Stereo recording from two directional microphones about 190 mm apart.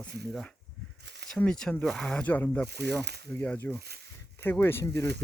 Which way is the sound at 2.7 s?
60° right (ahead or behind).